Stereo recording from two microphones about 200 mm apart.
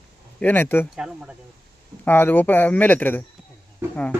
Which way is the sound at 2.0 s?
10° left (ahead or behind).